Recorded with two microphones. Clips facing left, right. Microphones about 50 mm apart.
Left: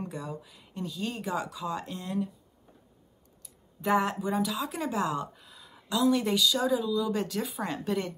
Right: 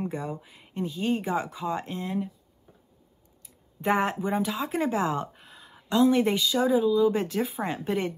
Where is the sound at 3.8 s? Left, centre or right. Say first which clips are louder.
Right 1 dB; right.